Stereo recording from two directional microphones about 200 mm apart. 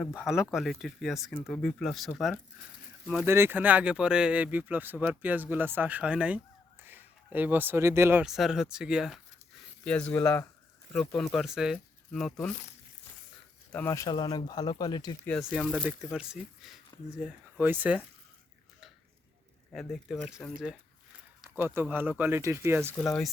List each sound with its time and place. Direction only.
0.1 s speech: 5° right (ahead or behind)
3.2 s speech: 10° right (ahead or behind)
13.7 s speech: 15° left (ahead or behind)
15.2 s speech: 5° left (ahead or behind)
15.4 s speech: 5° right (ahead or behind)
19.7 s speech: centre (ahead or behind)
23.0 s speech: 5° left (ahead or behind)